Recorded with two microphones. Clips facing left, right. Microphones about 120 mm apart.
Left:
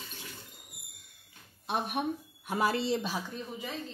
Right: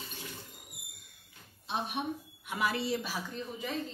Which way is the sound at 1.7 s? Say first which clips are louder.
Left 3 dB; 55° left (ahead or behind).